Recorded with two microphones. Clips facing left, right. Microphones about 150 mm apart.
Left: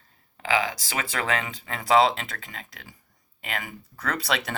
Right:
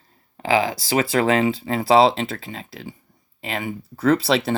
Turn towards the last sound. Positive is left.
turn(degrees=-30)  # may be behind; listen again after turning